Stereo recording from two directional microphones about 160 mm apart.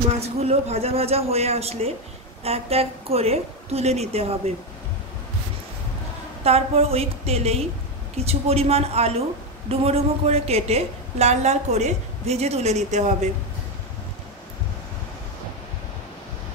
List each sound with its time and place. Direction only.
0.2 s a woman's voice: 40° right (ahead or behind)
6.4 s a woman's voice: 40° right (ahead or behind)